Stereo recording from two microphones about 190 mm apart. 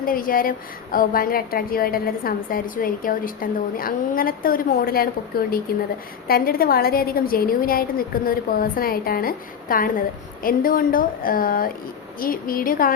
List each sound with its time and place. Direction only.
0.0 s a woman's voice: 50° left (ahead or behind)